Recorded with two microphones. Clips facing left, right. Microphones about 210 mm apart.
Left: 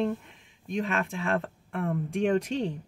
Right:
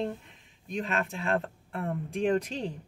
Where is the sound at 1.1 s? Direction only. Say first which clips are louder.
Left 1 dB; 35° right (ahead or behind).